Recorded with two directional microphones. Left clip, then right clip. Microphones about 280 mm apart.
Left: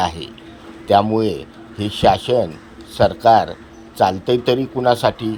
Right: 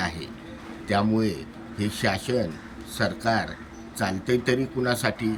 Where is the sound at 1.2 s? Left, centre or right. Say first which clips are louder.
Left 8 dB; centre.